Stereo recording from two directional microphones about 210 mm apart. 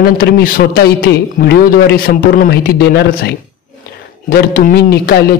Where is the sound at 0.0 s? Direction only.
45° left (ahead or behind).